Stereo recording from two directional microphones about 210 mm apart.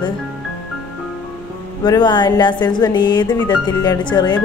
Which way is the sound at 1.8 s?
20° left (ahead or behind).